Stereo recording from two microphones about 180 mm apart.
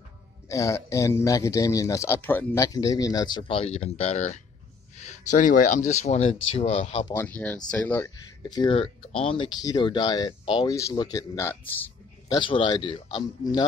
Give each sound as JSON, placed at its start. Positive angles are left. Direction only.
{"t": 0.5, "sound": "speech", "side_deg": 15}
{"t": 7.1, "sound": "speech", "side_deg": 10}
{"t": 8.4, "sound": "speech", "side_deg": 25}